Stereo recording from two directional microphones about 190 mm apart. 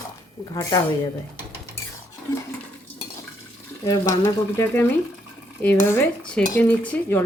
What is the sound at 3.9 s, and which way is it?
Speech, 15° left (ahead or behind).